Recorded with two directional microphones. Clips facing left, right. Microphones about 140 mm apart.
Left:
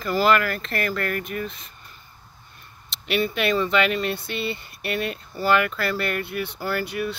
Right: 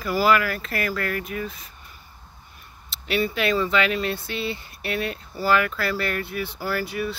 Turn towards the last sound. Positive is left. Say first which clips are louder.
# even
turn(degrees=0)  # may be behind; listen again after turning